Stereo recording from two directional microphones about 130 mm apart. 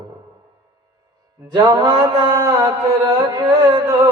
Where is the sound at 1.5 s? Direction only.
35° right (ahead or behind).